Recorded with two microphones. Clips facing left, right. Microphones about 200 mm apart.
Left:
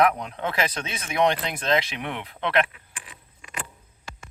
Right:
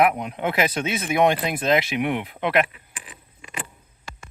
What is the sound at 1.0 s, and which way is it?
Speech, 5° right (ahead or behind).